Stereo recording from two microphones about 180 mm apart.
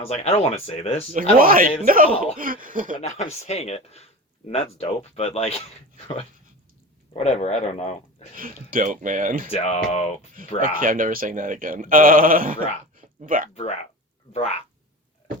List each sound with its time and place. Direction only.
0.0 s speech: 35° left (ahead or behind)
1.1 s speech: 50° right (ahead or behind)
3.0 s speech: 40° left (ahead or behind)
7.1 s speech: 35° left (ahead or behind)
8.4 s speech: 50° right (ahead or behind)
9.5 s speech: 35° left (ahead or behind)
10.6 s speech: 50° right (ahead or behind)
13.5 s speech: 35° left (ahead or behind)